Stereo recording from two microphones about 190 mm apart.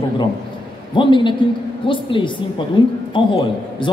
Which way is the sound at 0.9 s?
25° left (ahead or behind).